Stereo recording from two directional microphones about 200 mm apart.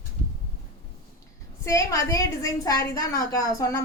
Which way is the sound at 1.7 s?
15° left (ahead or behind).